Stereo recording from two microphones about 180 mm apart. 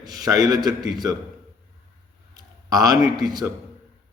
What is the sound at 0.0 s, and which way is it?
A man's voice, 20° right (ahead or behind).